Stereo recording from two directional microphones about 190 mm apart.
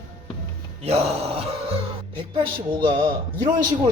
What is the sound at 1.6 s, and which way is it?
Music, 30° right (ahead or behind).